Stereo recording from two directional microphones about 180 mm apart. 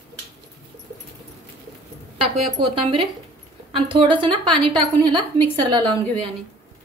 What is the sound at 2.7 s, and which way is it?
A woman's voice, 30° right (ahead or behind).